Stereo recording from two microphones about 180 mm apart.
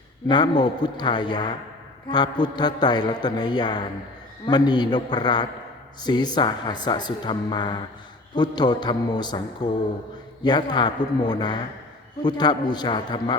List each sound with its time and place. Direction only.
0.3 s speech: 25° left (ahead or behind)